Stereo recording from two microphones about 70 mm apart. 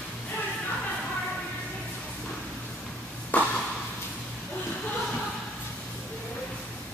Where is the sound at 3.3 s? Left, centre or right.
Left.